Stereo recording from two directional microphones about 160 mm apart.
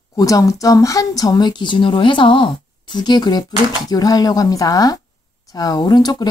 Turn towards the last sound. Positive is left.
turn(degrees=25)  # may be behind; listen again after turning